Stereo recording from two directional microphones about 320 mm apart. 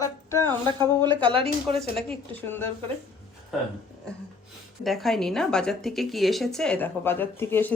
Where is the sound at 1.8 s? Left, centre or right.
Centre.